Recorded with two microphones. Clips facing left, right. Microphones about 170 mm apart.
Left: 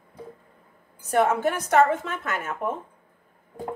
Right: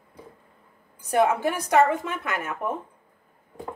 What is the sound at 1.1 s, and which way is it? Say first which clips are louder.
Speech: even; 10° right (ahead or behind).